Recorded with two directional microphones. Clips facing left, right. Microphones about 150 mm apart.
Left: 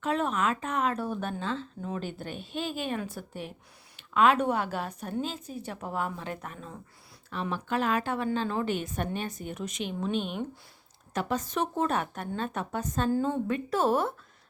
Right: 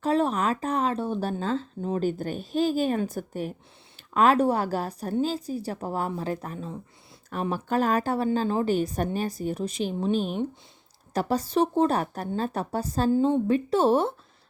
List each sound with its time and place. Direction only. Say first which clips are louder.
0.0 s speech: right 4 dB; 35° right (ahead or behind)
13.1 s speech: right 7 dB; 20° right (ahead or behind)